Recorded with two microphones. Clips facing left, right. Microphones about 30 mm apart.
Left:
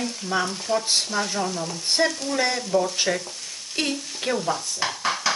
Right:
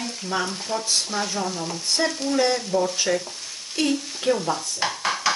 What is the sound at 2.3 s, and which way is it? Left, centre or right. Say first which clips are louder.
Speech: right 6 dB; centre.